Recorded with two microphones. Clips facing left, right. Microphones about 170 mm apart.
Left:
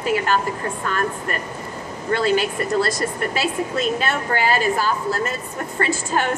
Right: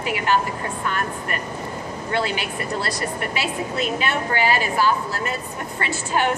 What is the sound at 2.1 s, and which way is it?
A woman's voice, 45° left (ahead or behind).